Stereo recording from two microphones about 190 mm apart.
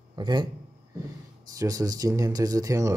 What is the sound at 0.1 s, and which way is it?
Speech, 25° right (ahead or behind).